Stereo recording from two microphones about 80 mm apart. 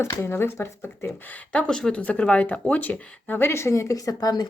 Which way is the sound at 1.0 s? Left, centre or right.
Centre.